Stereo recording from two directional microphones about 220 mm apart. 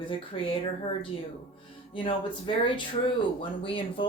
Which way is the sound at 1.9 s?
20° left (ahead or behind).